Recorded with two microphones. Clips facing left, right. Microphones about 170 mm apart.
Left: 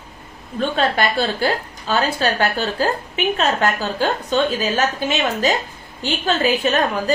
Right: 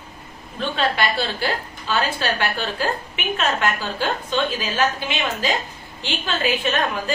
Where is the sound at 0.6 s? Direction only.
45° left (ahead or behind).